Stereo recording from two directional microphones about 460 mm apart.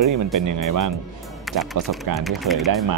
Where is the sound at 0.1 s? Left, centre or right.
Right.